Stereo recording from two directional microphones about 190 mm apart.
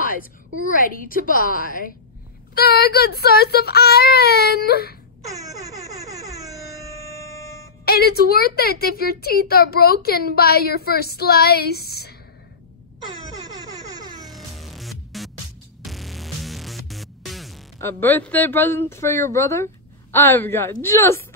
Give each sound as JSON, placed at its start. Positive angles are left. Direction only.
{"t": 0.7, "sound": "a woman's voice", "side_deg": 45}
{"t": 7.8, "sound": "a woman's voice", "side_deg": 55}
{"t": 14.2, "sound": "music", "side_deg": 0}
{"t": 17.7, "sound": "speech", "side_deg": 10}